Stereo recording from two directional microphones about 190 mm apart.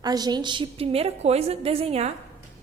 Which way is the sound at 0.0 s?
20° right (ahead or behind).